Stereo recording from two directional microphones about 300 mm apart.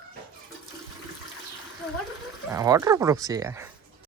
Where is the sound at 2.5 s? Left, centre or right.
Centre.